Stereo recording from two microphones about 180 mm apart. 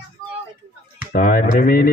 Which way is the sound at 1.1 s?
55° left (ahead or behind).